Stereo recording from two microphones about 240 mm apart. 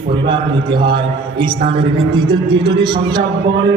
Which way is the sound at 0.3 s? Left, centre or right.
Centre.